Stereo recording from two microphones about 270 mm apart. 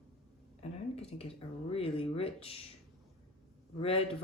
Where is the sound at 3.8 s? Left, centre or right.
Left.